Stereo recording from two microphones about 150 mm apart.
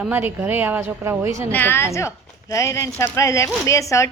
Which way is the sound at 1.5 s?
15° left (ahead or behind).